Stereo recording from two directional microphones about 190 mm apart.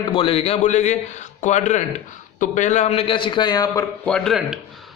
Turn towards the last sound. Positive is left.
turn(degrees=5)  # may be behind; listen again after turning